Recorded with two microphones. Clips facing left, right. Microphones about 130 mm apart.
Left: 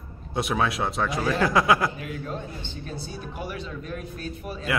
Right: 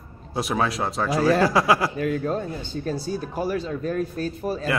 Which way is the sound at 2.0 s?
45° right (ahead or behind).